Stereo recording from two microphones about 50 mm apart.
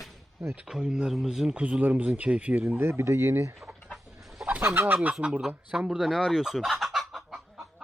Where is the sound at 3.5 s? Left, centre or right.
Centre.